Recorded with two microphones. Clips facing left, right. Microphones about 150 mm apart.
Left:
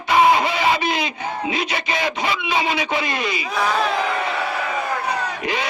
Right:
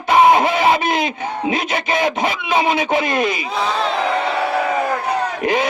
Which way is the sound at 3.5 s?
25° right (ahead or behind).